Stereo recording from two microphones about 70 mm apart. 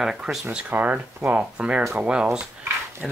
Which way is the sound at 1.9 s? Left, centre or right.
Centre.